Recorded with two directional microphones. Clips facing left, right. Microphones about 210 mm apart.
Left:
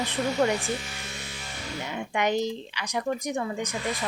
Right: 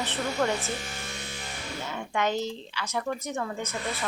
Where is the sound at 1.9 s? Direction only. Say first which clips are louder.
Left 2 dB; 15° left (ahead or behind).